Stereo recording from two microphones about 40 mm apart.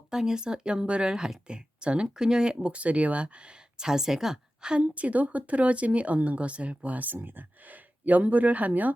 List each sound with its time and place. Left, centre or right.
0.1 s speech: centre
2.6 s speech: right; by 4.4 s centre
4.8 s speech: right
7.1 s speech: right